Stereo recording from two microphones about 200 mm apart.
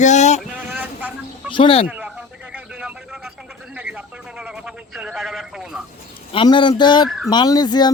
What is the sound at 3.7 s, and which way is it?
A man's voice, 5° right (ahead or behind).